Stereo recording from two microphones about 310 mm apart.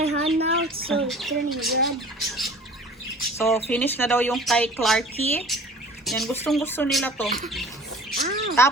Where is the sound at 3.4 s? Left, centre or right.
Centre.